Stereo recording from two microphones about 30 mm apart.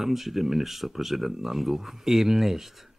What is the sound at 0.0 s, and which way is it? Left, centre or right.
Speech, centre.